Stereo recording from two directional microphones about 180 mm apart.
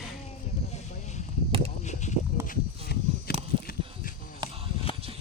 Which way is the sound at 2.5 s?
55° left (ahead or behind).